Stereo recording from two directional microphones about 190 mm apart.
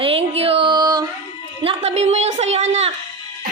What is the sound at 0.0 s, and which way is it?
Child singing, 30° right (ahead or behind).